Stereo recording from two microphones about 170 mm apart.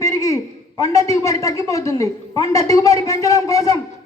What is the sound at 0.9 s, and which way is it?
A woman's voice, 15° left (ahead or behind).